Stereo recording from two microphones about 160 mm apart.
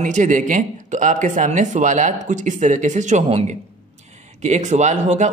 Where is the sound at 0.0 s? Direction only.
50° right (ahead or behind).